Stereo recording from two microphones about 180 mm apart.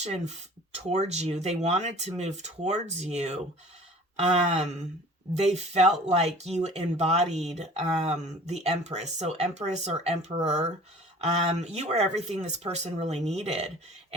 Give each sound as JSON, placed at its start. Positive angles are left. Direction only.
{"t": 0.0, "sound": "speech", "side_deg": -35}